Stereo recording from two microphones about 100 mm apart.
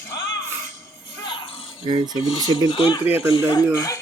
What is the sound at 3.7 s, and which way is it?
Speech, 35° left (ahead or behind).